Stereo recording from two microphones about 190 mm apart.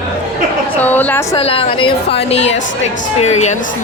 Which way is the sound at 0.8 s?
10° left (ahead or behind).